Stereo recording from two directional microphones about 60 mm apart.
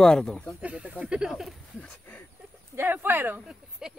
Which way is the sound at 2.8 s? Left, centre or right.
Right.